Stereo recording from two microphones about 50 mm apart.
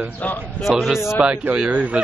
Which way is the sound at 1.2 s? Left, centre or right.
Right.